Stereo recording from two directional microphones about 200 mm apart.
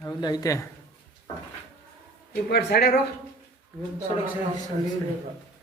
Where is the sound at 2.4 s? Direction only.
55° left (ahead or behind).